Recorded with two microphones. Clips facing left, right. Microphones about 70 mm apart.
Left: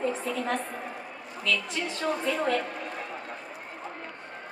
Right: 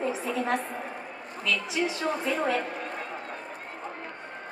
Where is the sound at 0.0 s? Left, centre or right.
Centre.